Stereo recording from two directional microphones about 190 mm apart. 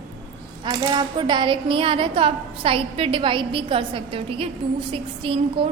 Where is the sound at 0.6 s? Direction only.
25° right (ahead or behind).